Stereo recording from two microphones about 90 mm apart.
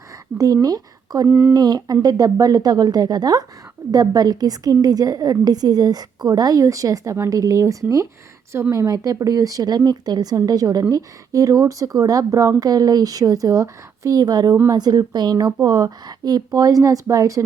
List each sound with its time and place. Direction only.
0.3 s speech: 40° right (ahead or behind)
1.3 s speech: 20° right (ahead or behind)
1.5 s speech: 50° right (ahead or behind)